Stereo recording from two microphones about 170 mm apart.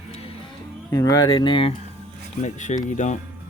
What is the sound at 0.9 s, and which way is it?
Speech, 25° left (ahead or behind).